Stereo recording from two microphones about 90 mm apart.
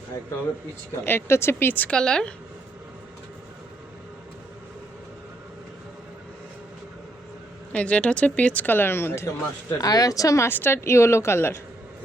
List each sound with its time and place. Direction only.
1.0 s a woman's voice: 25° left (ahead or behind); by 2.3 s 10° left (ahead or behind)
7.7 s speech: 15° left (ahead or behind)
9.7 s speech: 45° left (ahead or behind)
10.5 s a woman's voice: 25° left (ahead or behind)